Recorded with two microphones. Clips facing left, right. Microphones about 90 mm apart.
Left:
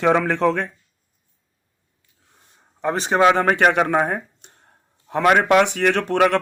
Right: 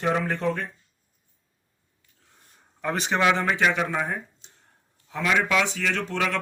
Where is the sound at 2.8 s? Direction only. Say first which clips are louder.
Left 6 dB; 35° left (ahead or behind).